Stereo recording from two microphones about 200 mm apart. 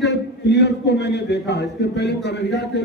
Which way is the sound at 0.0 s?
60° left (ahead or behind).